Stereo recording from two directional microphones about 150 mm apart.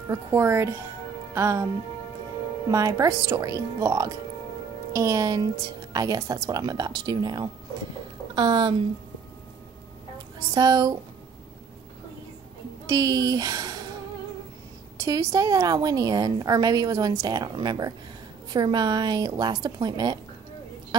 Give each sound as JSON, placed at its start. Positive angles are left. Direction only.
{"t": 0.1, "sound": "a woman's voice", "side_deg": -15}
{"t": 2.7, "sound": "a woman's voice", "side_deg": -20}
{"t": 10.5, "sound": "a woman's voice", "side_deg": -25}
{"t": 12.8, "sound": "a woman's voice", "side_deg": -25}
{"t": 15.0, "sound": "a woman's voice", "side_deg": -25}